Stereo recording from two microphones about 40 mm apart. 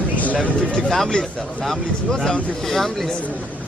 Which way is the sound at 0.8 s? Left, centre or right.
Centre.